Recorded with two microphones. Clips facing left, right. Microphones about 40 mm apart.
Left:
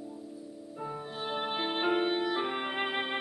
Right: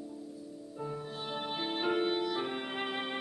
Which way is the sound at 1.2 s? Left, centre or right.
Left.